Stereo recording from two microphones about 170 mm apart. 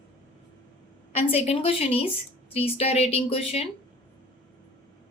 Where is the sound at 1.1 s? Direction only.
35° left (ahead or behind).